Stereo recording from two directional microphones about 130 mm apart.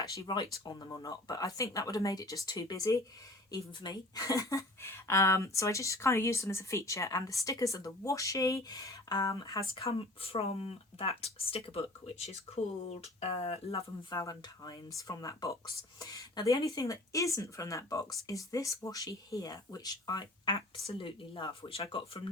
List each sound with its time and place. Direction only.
0.1 s speech: 30° left (ahead or behind)
9.7 s speech: 45° left (ahead or behind)
14.1 s speech: 30° left (ahead or behind)